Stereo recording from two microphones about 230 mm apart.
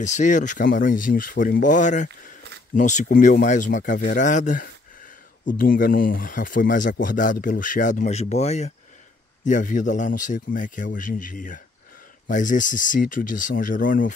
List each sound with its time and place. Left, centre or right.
0.0 s speech: left